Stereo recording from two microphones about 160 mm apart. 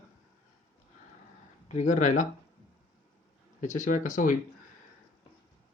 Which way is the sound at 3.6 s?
50° left (ahead or behind).